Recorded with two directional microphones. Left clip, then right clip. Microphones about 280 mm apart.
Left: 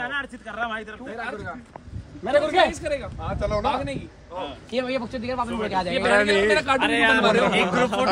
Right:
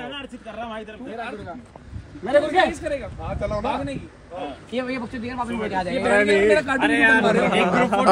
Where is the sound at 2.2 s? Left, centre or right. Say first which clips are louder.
Right 1 dB; left.